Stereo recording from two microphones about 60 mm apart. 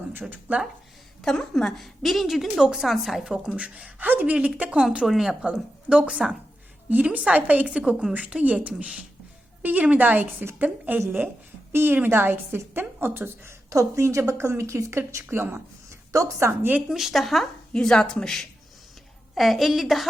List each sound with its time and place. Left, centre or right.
0.1 s a woman's voice: right
1.2 s a woman's voice: centre
4.0 s a woman's voice: right
5.0 s a woman's voice: centre
5.9 s a woman's voice: centre
11.7 s a woman's voice: right
13.7 s speech: right
15.9 s a sound: right
16.9 s a woman's voice: centre
17.7 s speech: centre
19.3 s a woman's voice: centre